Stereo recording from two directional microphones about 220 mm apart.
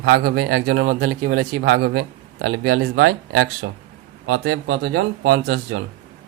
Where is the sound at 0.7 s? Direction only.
55° right (ahead or behind).